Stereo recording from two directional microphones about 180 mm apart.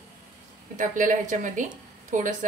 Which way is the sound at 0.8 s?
45° right (ahead or behind).